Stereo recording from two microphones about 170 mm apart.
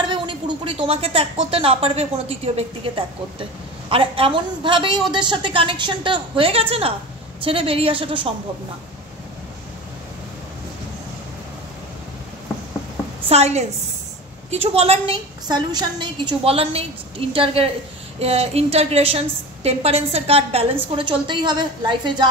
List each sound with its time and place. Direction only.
0.0 s a woman's voice: 30° right (ahead or behind)
3.9 s a woman's voice: 30° right (ahead or behind)
13.3 s a woman's voice: 40° right (ahead or behind)